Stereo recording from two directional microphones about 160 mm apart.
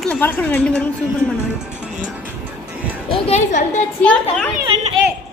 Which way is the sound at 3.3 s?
45° left (ahead or behind).